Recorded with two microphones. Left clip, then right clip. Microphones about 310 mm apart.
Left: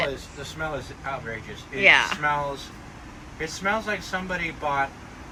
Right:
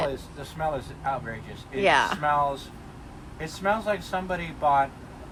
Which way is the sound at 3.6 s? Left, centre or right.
Centre.